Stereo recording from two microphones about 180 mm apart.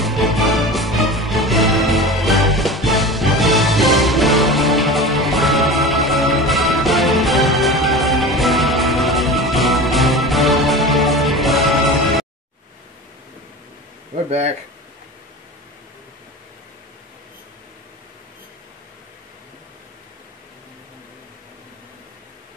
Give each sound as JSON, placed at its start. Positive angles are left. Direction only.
{"t": 0.0, "sound": "music", "side_deg": 0}